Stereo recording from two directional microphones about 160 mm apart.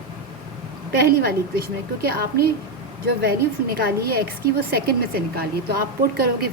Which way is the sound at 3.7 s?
75° right (ahead or behind).